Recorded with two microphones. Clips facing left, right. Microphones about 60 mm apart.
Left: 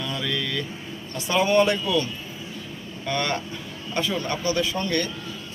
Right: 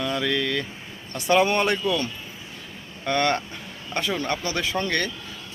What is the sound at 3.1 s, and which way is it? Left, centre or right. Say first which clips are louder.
Speech: right 4 dB; right.